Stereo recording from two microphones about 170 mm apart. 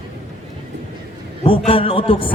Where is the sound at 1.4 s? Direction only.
30° left (ahead or behind).